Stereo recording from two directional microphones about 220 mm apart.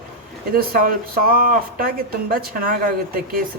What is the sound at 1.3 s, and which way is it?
Speech, 40° right (ahead or behind).